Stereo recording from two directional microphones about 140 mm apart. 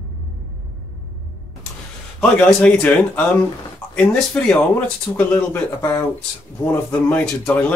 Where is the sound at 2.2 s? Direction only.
10° left (ahead or behind).